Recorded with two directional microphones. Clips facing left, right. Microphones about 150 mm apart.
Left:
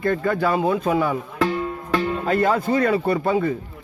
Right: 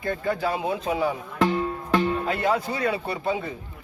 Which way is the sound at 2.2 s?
45° left (ahead or behind).